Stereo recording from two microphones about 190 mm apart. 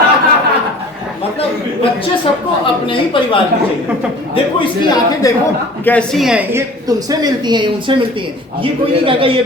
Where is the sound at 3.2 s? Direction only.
25° left (ahead or behind).